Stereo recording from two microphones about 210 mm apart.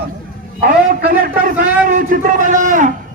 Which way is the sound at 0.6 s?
45° right (ahead or behind).